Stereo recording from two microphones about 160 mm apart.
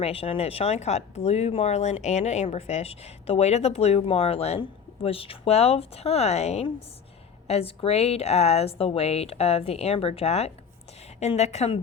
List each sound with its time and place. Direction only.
0.0 s a woman's voice: 35° left (ahead or behind)